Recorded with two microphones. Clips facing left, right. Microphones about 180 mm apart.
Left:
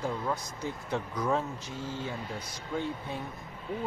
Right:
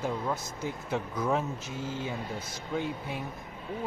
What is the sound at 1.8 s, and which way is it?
A man's voice, 15° right (ahead or behind).